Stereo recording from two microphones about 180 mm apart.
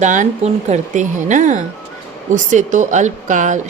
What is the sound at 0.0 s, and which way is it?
Speech, 45° right (ahead or behind).